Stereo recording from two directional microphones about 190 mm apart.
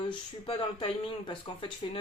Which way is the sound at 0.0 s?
25° left (ahead or behind).